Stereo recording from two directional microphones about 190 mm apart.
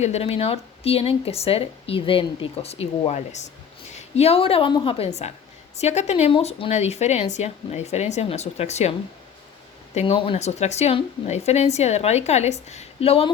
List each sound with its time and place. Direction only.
0.0 s speech: 35° left (ahead or behind)